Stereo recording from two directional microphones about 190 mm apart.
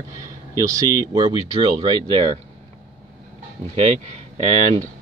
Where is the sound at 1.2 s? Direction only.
30° right (ahead or behind).